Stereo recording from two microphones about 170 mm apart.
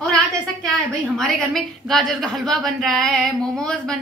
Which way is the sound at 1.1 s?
Centre (ahead or behind).